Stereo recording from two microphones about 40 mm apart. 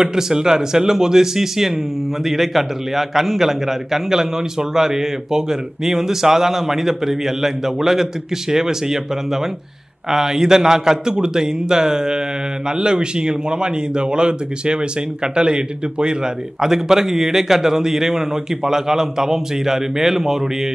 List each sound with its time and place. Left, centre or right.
0.0 s a man's voice: centre
16.6 s a man's voice: centre